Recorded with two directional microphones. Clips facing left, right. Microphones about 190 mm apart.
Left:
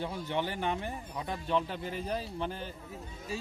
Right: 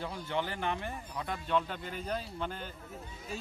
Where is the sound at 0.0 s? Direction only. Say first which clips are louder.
Left 2 dB; 20° left (ahead or behind).